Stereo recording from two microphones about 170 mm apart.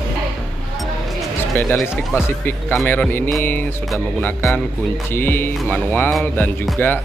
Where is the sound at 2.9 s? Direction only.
10° left (ahead or behind).